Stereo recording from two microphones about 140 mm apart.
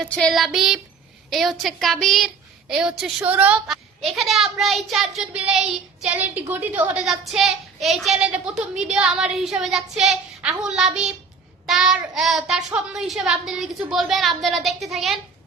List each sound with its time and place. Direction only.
0.0 s speech: centre (ahead or behind)
7.0 s speech: centre (ahead or behind)